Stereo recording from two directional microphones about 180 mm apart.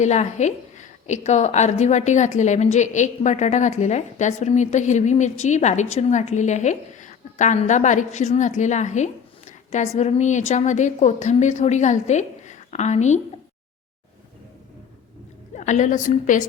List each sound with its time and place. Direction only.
0.0 s a woman's voice: 40° left (ahead or behind)
15.5 s a woman's voice: 40° left (ahead or behind)